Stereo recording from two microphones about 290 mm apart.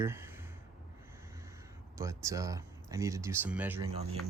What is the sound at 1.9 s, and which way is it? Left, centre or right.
Speech, centre.